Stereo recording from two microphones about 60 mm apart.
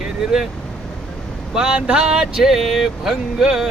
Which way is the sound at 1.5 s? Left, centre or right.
Centre.